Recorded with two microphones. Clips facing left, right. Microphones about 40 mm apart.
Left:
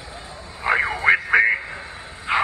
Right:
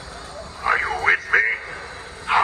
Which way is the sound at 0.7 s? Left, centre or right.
Centre.